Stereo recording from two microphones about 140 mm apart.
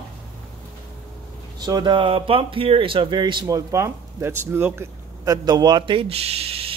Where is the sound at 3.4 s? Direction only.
20° right (ahead or behind).